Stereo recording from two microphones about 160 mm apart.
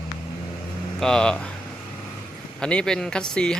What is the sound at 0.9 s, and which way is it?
Speech, 5° left (ahead or behind).